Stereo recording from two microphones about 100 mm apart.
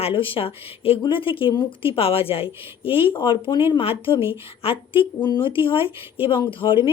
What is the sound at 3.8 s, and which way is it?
Speech, 65° left (ahead or behind).